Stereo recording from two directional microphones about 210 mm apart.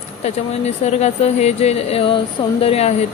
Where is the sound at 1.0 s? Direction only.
30° left (ahead or behind).